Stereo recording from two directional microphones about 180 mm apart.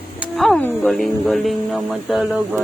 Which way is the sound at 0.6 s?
5° left (ahead or behind).